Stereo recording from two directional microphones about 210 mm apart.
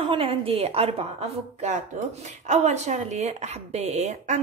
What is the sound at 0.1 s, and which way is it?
Speech, 25° right (ahead or behind).